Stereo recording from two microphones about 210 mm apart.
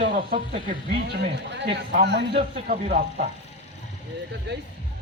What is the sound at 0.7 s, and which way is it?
Speech, 55° right (ahead or behind).